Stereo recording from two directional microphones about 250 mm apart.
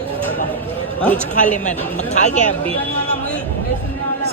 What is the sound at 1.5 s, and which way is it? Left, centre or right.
Speech, left.